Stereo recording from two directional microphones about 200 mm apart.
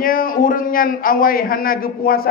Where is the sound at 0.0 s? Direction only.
45° left (ahead or behind).